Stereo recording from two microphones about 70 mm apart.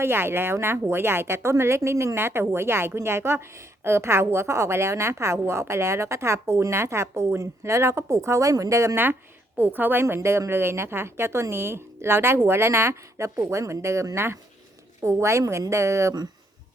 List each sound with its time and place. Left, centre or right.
0.0 s a woman's voice: right
9.6 s a woman's voice: right